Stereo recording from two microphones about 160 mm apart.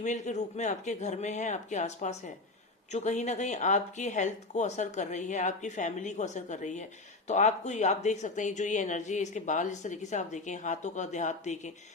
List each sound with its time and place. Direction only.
0.0 s speech: 50° left (ahead or behind)